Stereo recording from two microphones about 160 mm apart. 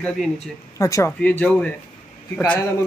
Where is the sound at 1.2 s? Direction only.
10° left (ahead or behind).